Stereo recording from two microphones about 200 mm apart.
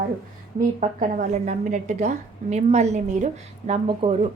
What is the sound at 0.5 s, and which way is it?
A woman's voice, 40° right (ahead or behind).